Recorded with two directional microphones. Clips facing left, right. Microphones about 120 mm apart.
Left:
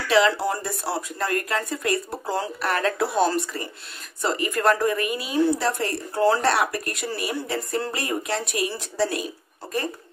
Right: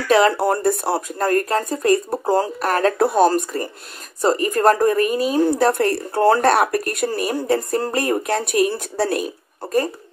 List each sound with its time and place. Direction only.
0.1 s speech: 50° right (ahead or behind)